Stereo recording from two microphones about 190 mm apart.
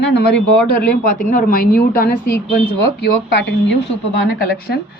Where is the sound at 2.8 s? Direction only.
65° left (ahead or behind).